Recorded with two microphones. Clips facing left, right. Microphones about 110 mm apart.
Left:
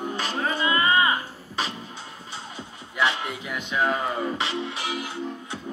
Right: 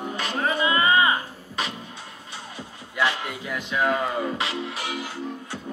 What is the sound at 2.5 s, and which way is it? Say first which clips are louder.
Music: even; 25° left (ahead or behind).